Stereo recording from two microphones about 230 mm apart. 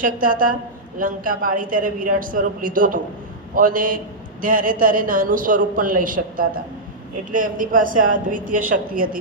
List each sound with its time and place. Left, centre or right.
0.0 s a man's voice: right